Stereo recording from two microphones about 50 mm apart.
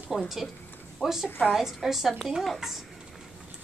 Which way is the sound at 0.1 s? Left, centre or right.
Centre.